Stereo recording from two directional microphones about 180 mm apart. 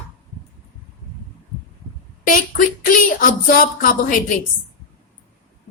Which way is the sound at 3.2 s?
50° left (ahead or behind).